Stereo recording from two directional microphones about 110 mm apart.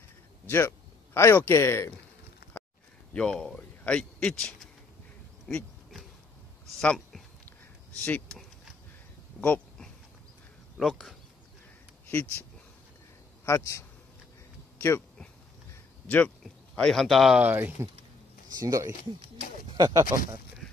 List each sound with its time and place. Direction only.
0.5 s speech: 20° left (ahead or behind)
3.1 s speech: 10° left (ahead or behind)
6.8 s speech: 5° left (ahead or behind)
9.4 s a sound: 15° left (ahead or behind)
10.8 s speech: centre (ahead or behind)
12.1 s speech: 20° left (ahead or behind)
13.5 s speech: 30° left (ahead or behind)
16.7 s speech: 5° left (ahead or behind)
17.4 s speech: 15° right (ahead or behind)
18.5 s speech: 30° right (ahead or behind)